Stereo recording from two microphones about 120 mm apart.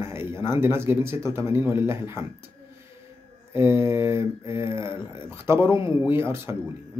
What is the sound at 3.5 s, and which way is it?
Speech, 20° right (ahead or behind).